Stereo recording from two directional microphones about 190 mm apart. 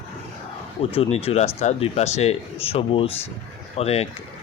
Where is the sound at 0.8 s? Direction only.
30° left (ahead or behind).